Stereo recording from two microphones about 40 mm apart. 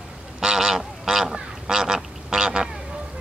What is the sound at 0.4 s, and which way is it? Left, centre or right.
Goose, centre.